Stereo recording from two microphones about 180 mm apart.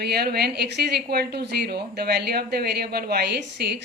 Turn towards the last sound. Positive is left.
turn(degrees=-65)  # may be behind; listen again after turning